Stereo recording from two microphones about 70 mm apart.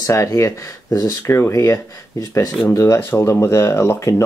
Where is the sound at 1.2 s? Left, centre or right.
Left.